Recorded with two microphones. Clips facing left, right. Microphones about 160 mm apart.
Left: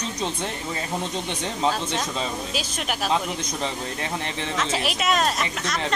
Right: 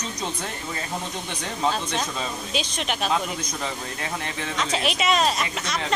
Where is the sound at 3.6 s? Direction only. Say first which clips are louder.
Left 2 dB; 25° left (ahead or behind).